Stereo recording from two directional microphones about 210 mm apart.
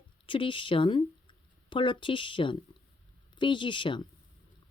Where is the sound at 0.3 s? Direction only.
25° left (ahead or behind).